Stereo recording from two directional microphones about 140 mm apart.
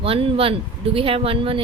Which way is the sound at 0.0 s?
40° right (ahead or behind).